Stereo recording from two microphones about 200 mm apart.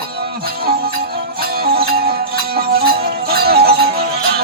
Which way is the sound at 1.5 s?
50° right (ahead or behind).